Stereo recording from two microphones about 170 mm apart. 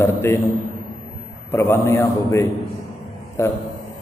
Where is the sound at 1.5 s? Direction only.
15° left (ahead or behind).